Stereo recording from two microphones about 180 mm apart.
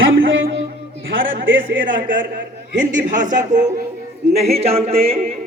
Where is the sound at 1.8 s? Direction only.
50° right (ahead or behind).